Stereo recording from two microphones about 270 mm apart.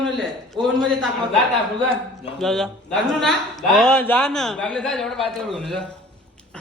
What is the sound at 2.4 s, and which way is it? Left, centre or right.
A man's voice, centre.